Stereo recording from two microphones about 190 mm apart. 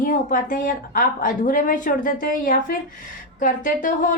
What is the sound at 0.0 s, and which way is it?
A woman's voice, 45° left (ahead or behind).